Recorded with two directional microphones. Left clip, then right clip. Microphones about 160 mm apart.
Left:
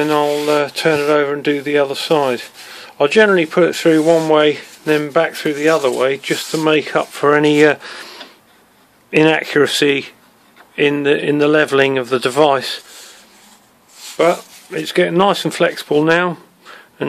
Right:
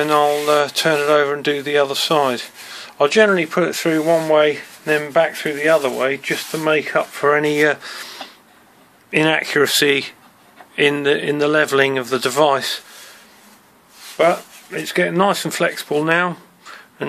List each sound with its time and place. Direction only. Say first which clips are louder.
0.0 s speech: even; 35° left (ahead or behind)
14.1 s speech: left 1 dB; 55° left (ahead or behind); by 16.8 s 35° left (ahead or behind)